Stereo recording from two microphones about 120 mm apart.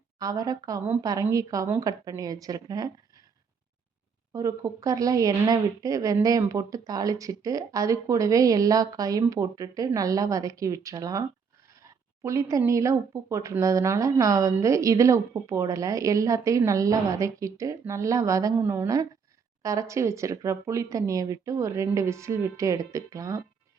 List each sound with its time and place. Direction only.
0.2 s a woman's voice: 30° right (ahead or behind)
4.3 s speech: 25° right (ahead or behind)